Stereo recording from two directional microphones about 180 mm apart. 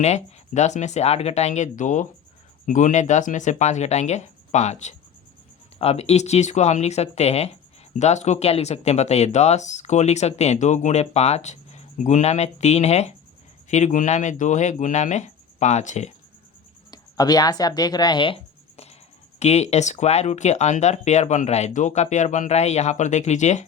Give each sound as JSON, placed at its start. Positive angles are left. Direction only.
{"t": 0.0, "sound": "speech", "side_deg": 40}
{"t": 16.9, "sound": "speech", "side_deg": 20}